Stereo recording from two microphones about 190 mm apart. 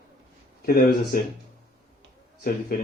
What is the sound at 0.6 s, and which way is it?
Speech, 50° left (ahead or behind).